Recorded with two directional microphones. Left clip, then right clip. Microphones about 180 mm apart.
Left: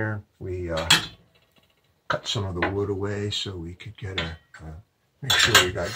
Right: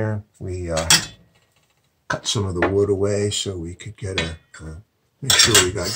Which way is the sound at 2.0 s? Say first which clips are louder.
Right 3 dB; 10° right (ahead or behind).